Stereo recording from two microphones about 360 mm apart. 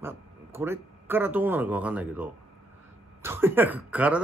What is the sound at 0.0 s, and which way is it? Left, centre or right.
A man's voice, centre.